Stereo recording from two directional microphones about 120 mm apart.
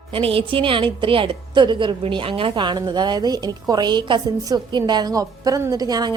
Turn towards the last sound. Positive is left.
turn(degrees=-35)  # may be behind; listen again after turning